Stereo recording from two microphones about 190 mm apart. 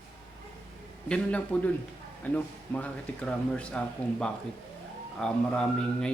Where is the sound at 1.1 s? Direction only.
5° left (ahead or behind).